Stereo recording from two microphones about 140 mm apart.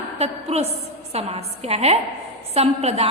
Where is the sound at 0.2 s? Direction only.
45° right (ahead or behind).